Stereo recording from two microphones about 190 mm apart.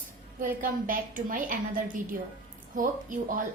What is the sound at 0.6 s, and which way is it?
A woman's voice, 45° right (ahead or behind).